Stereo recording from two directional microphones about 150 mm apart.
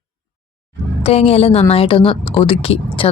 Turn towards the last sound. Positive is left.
turn(degrees=40)  # may be behind; listen again after turning